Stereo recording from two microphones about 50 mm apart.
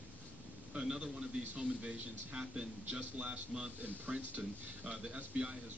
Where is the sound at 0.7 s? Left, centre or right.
Centre.